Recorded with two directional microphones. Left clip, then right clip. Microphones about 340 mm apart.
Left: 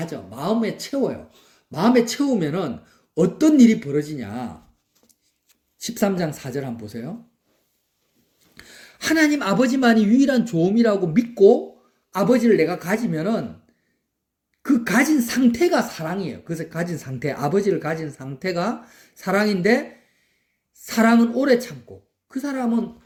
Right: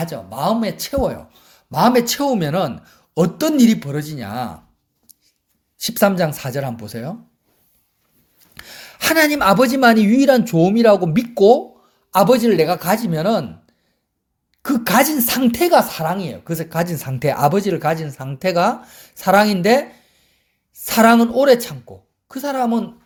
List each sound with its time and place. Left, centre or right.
0.0 s a woman's voice: right
5.8 s a woman's voice: right
8.5 s a woman's voice: right
14.6 s a woman's voice: right
20.8 s a woman's voice: right